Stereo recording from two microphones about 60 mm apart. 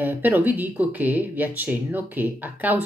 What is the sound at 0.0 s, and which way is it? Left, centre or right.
Speech, right.